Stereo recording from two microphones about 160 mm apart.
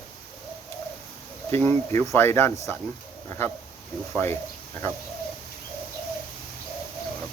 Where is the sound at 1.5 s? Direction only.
15° left (ahead or behind).